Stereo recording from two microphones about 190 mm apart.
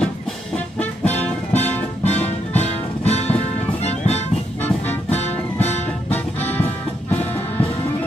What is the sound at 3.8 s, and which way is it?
Music, 35° left (ahead or behind).